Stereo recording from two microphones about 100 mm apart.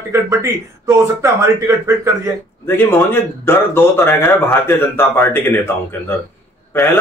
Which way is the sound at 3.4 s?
20° left (ahead or behind).